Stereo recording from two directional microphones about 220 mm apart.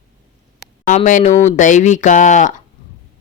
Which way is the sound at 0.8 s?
35° left (ahead or behind).